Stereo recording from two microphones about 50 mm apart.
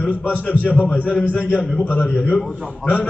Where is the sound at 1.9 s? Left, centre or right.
Left.